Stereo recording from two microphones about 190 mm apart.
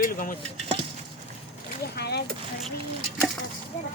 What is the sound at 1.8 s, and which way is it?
Boat, 55° left (ahead or behind).